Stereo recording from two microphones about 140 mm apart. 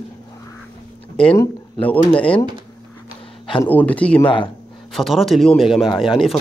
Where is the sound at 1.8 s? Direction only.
10° left (ahead or behind).